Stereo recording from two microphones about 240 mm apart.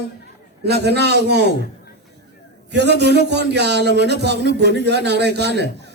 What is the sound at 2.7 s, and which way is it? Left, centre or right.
Speech, right.